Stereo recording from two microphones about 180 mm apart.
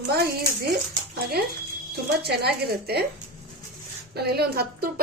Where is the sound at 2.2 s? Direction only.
65° right (ahead or behind).